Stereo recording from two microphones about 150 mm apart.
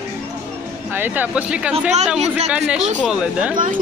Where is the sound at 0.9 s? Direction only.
10° right (ahead or behind).